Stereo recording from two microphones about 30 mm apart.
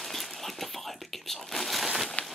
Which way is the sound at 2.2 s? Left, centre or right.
Left.